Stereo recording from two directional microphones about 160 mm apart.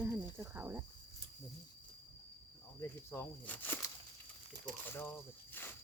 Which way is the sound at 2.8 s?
15° left (ahead or behind).